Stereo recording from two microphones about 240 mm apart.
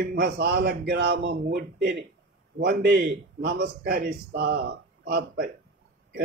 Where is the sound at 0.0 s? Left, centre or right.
Right.